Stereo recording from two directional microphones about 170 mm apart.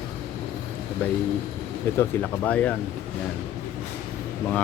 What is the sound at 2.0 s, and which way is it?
Speech, 10° left (ahead or behind).